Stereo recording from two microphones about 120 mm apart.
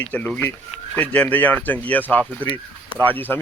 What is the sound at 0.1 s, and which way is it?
Speech, 10° left (ahead or behind).